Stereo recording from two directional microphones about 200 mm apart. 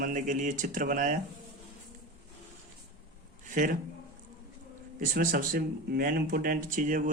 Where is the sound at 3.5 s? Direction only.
40° right (ahead or behind).